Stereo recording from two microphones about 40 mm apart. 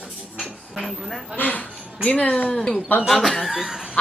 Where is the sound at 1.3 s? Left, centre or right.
Left.